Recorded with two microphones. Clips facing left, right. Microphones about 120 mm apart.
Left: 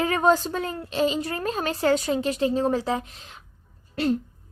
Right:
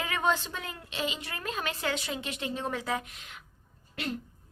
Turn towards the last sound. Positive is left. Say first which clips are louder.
# left 11 dB
turn(degrees=30)  # may be behind; listen again after turning